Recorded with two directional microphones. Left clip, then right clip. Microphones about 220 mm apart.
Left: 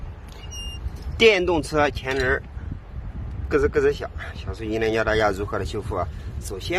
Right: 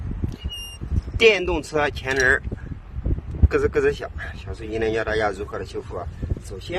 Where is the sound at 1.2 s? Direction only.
5° left (ahead or behind).